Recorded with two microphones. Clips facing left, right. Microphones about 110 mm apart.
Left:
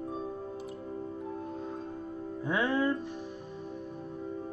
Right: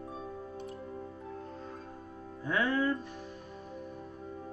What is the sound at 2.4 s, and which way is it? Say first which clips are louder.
Speech: left 1 dB; 20° left (ahead or behind).